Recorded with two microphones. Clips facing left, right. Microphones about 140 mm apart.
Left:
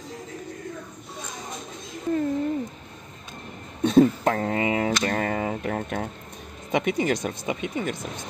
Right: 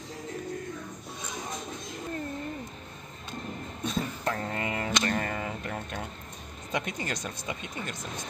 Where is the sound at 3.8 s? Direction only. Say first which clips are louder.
Left 14 dB; 70° left (ahead or behind).